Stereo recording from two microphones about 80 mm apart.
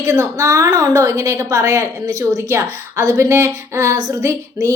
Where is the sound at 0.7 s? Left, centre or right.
Right.